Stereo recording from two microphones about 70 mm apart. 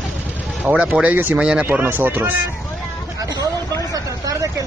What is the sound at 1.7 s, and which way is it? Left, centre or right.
Speech, right.